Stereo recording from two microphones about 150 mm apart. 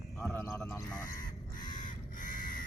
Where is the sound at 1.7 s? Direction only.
60° left (ahead or behind).